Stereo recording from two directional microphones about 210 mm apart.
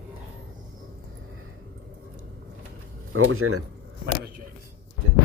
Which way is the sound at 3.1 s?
90° right.